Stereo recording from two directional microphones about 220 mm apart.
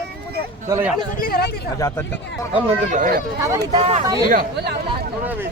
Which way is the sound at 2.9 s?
40° right (ahead or behind).